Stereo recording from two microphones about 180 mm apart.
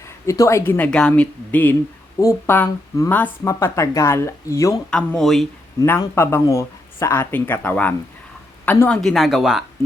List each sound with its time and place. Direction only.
0.3 s speech: 15° left (ahead or behind)
4.9 s speech: 5° left (ahead or behind)
5.8 s speech: 15° left (ahead or behind)
9.0 s speech: centre (ahead or behind)